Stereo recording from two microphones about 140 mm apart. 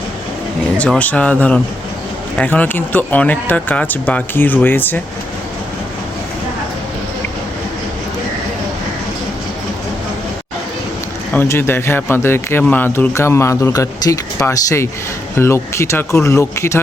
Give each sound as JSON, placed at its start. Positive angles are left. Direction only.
{"t": 0.8, "sound": "a man's voice", "side_deg": 10}
{"t": 11.3, "sound": "a man's voice", "side_deg": 15}